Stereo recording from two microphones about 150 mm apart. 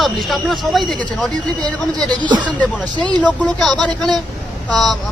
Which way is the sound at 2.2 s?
30° right (ahead or behind).